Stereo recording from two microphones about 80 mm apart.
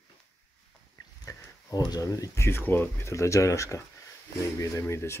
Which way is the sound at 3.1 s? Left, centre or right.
Left.